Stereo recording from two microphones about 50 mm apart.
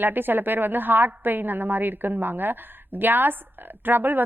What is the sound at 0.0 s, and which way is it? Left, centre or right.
A woman's voice, right.